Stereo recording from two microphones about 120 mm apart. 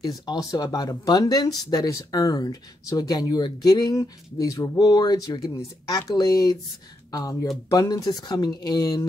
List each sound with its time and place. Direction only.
0.0 s speech: 30° left (ahead or behind)